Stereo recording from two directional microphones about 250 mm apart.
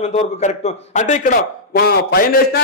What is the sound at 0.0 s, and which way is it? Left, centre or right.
A man's voice, left.